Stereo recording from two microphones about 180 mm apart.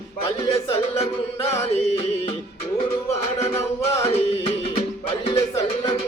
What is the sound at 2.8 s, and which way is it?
Music, 35° left (ahead or behind).